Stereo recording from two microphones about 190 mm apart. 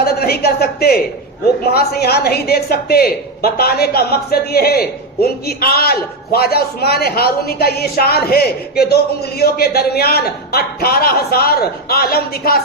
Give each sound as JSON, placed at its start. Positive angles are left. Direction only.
{"t": 0.0, "sound": "a woman's voice", "side_deg": 55}